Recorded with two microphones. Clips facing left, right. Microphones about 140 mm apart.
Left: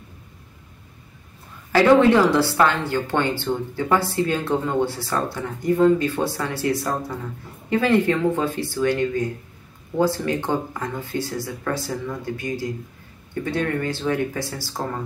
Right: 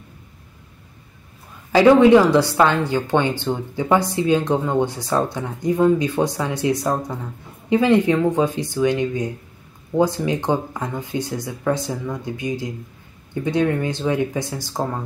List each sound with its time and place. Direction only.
1.7 s speech: 15° right (ahead or behind)